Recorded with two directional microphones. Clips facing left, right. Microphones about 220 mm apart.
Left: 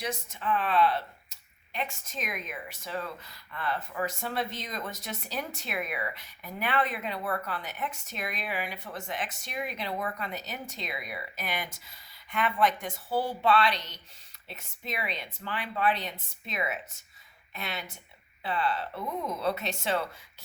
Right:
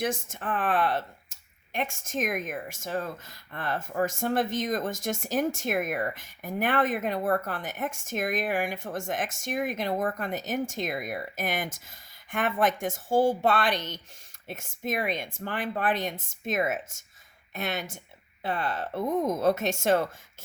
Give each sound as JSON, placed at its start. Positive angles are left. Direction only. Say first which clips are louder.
{"t": 0.0, "sound": "speech", "louder": "right 4 dB", "side_deg": -50}